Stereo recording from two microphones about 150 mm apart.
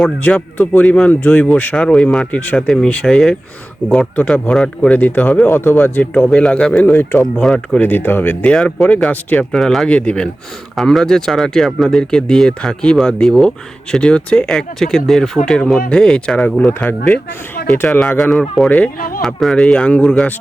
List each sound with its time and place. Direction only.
0.0 s speech: 5° left (ahead or behind)
18.9 s speech: 70° left (ahead or behind)
19.2 s speech: centre (ahead or behind)